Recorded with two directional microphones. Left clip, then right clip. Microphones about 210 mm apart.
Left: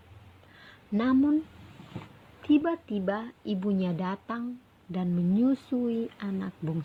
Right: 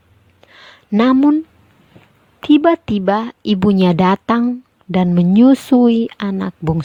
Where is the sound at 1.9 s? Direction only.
45° left (ahead or behind).